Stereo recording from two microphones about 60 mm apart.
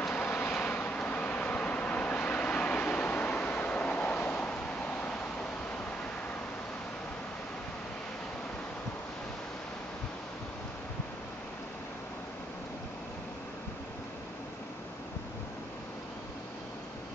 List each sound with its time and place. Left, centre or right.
0.1 s vehicle: left
0.7 s vehicle: left
4.5 s a sound: centre